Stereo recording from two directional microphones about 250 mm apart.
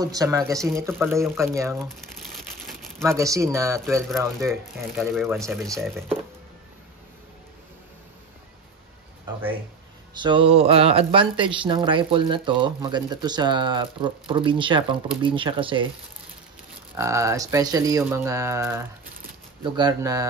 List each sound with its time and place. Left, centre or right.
0.0 s speech: centre
2.6 s crumpling: centre
3.1 s speech: centre
4.7 s speech: centre
5.8 s speech: centre
10.1 s speech: centre
16.9 s speech: centre